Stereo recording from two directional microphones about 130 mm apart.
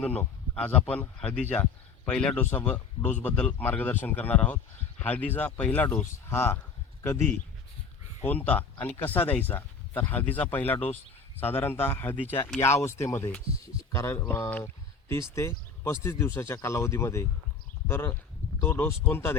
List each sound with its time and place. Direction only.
0.0 s a man's voice: 10° left (ahead or behind)